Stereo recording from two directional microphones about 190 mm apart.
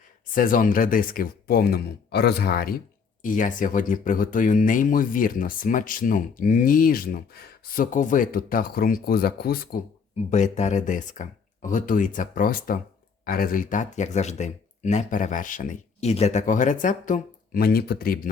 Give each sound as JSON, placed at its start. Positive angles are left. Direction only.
{"t": 0.3, "sound": "speech", "side_deg": 45}
{"t": 10.2, "sound": "speech", "side_deg": 40}